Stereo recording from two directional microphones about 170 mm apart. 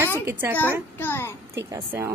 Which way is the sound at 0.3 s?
15° right (ahead or behind).